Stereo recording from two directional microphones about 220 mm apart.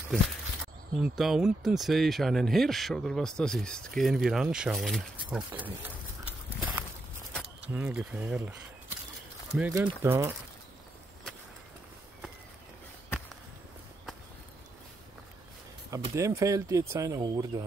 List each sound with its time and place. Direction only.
0.9 s speech: centre (ahead or behind)
15.9 s speech: 15° right (ahead or behind)